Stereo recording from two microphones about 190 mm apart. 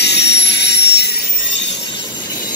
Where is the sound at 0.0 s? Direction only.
65° left (ahead or behind).